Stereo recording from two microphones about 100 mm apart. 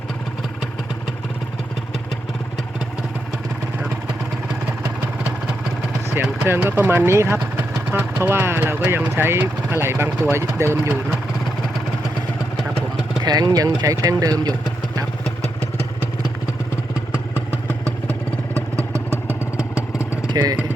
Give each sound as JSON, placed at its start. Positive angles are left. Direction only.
{"t": 6.1, "sound": "speech", "side_deg": -20}
{"t": 13.2, "sound": "speech", "side_deg": -40}
{"t": 18.1, "sound": "vehicle", "side_deg": -30}
{"t": 20.3, "sound": "speech", "side_deg": -40}